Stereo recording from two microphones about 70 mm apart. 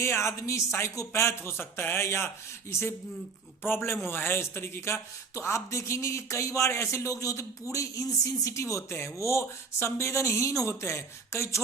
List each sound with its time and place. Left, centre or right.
0.0 s a man's voice: left